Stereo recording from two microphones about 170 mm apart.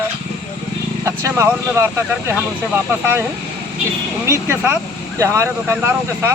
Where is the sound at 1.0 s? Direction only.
15° right (ahead or behind).